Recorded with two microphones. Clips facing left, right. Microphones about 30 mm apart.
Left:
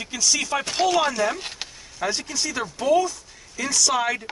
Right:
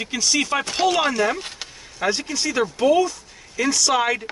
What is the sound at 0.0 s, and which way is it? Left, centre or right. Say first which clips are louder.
Chopping: right 2 dB; centre.